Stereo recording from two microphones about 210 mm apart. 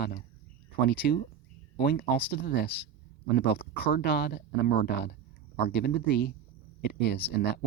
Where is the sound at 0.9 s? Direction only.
50° left (ahead or behind).